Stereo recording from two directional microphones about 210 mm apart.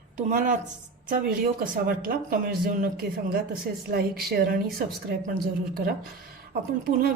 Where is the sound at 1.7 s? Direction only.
45° right (ahead or behind).